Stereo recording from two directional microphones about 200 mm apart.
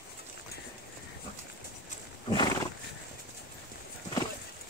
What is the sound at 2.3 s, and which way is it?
Wild animals, 20° left (ahead or behind).